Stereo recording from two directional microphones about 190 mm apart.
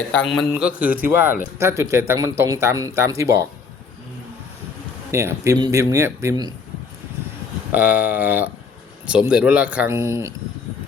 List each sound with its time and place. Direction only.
0.1 s speech: 5° left (ahead or behind); by 3.4 s 15° right (ahead or behind)
5.1 s speech: 15° right (ahead or behind)
7.7 s speech: 10° right (ahead or behind)